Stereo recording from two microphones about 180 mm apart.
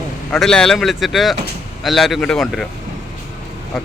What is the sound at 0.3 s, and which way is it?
Speech, 5° left (ahead or behind).